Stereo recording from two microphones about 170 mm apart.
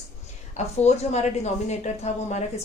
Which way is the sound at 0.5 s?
40° left (ahead or behind).